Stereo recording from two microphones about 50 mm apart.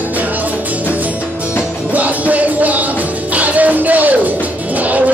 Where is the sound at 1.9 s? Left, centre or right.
Right.